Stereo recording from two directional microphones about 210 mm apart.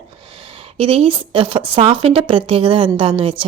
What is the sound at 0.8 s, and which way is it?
A woman's voice, 25° right (ahead or behind).